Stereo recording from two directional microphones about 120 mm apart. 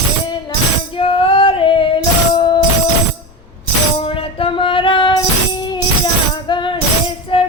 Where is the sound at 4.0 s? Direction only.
50° left (ahead or behind).